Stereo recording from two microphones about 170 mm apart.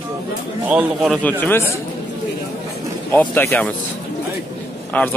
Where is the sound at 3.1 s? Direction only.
10° left (ahead or behind).